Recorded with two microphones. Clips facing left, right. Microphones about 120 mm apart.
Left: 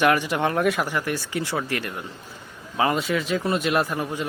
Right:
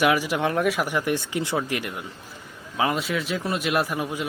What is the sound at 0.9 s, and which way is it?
Speech, 15° right (ahead or behind).